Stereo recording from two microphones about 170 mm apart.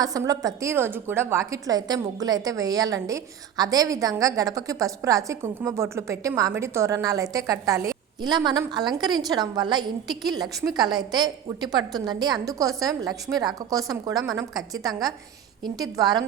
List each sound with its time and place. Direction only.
0.0 s a woman's voice: 20° right (ahead or behind)